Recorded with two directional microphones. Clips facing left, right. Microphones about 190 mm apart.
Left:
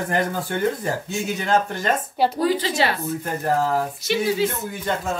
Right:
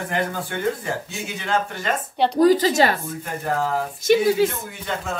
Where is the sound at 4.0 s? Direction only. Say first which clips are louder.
Right 10 dB; 50° right (ahead or behind).